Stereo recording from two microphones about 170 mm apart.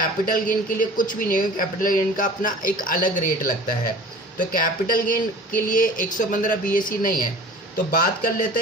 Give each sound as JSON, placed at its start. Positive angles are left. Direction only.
{"t": 0.0, "sound": "speech", "side_deg": 55}